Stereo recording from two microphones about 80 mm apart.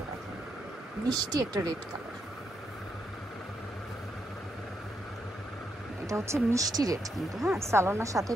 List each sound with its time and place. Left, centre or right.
1.0 s speech: right
6.0 s speech: right
7.5 s a woman's voice: right